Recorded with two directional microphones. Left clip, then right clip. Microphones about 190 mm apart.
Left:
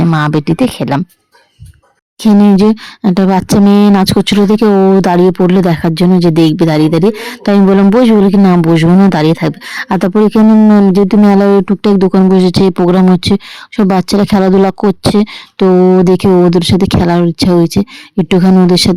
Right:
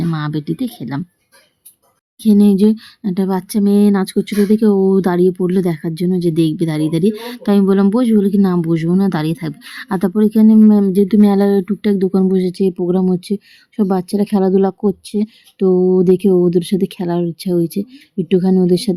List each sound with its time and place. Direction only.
0.0 s speech: 40° left (ahead or behind)
2.2 s speech: 35° left (ahead or behind)